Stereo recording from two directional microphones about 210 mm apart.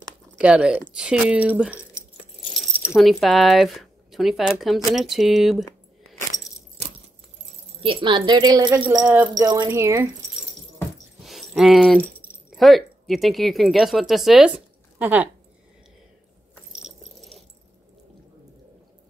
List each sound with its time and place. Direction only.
0.4 s speech: 5° right (ahead or behind)
2.9 s speech: centre (ahead or behind)
7.8 s speech: 25° right (ahead or behind)
9.0 s speech: 10° right (ahead or behind)
11.2 s speech: centre (ahead or behind)
16.8 s a sound: centre (ahead or behind)